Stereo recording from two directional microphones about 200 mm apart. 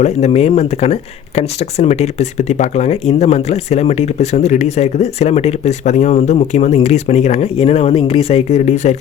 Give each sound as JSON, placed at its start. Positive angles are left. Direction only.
{"t": 0.0, "sound": "speech", "side_deg": 35}